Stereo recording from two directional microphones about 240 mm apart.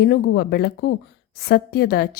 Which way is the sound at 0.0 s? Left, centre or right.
Left.